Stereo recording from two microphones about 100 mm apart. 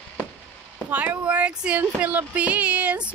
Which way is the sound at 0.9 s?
15° right (ahead or behind).